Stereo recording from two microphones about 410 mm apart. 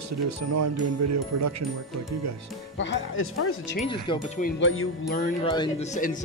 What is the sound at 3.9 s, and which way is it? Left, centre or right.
Speech, centre.